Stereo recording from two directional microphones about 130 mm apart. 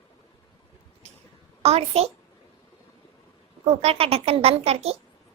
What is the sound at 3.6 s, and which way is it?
A woman's voice, 50° right (ahead or behind).